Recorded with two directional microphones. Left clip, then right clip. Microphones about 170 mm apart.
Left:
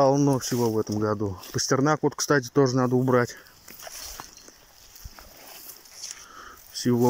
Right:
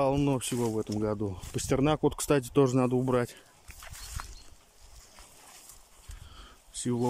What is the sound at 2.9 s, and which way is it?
Speech, 5° right (ahead or behind).